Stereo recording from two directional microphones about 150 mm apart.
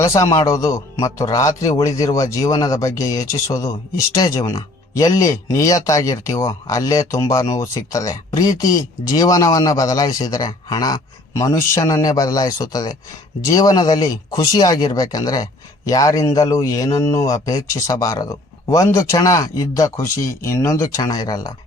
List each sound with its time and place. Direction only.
0.2 s speech: 20° left (ahead or behind)